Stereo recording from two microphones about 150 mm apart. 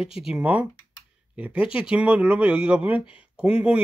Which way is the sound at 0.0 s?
5° right (ahead or behind).